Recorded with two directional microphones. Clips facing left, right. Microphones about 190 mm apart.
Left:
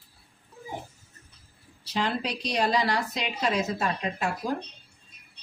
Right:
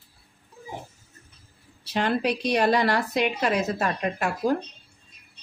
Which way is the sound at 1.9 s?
60° right (ahead or behind).